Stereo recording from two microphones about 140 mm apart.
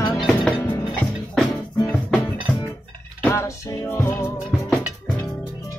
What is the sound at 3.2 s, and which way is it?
Music, 20° left (ahead or behind).